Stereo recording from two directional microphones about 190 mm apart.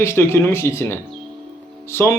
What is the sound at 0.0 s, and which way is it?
A man's voice, 15° left (ahead or behind).